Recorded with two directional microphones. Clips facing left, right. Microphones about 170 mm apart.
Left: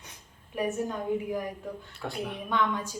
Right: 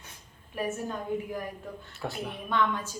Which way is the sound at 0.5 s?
15° left (ahead or behind).